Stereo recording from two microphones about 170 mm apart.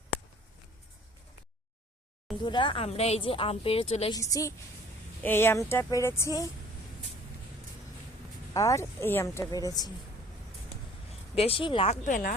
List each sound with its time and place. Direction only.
2.4 s a woman's voice: 30° left (ahead or behind)
4.1 s a woman's voice: 20° left (ahead or behind)
8.5 s a woman's voice: 20° left (ahead or behind)
11.3 s a woman's voice: 35° left (ahead or behind)
12.0 s speech: 50° left (ahead or behind)